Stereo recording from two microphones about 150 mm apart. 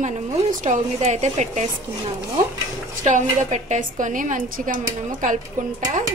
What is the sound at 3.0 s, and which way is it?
A woman's voice, 50° right (ahead or behind).